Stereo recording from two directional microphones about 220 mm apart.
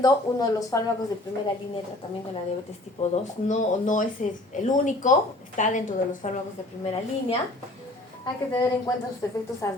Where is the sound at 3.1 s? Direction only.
35° left (ahead or behind).